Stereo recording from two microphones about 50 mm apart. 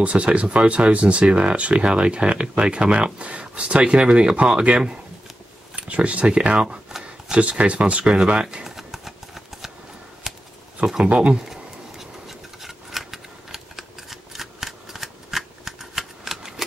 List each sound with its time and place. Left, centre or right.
0.0 s speech: right
8.6 s a sound: centre
11.1 s speech: right
11.3 s scissors: centre